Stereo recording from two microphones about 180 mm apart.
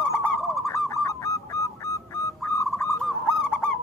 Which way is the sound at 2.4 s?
15° left (ahead or behind).